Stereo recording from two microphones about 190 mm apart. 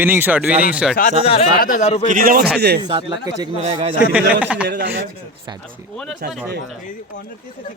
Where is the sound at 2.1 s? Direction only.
50° right (ahead or behind).